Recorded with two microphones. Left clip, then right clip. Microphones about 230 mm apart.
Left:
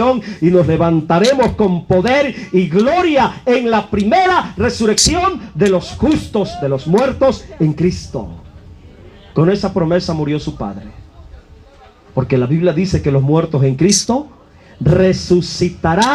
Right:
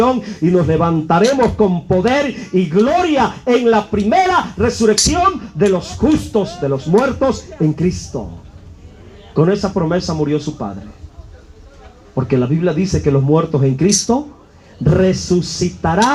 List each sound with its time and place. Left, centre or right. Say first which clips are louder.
0.0 s speech: left 1 dB; left
9.3 s speech: even; left
12.1 s speech: left 1 dB; left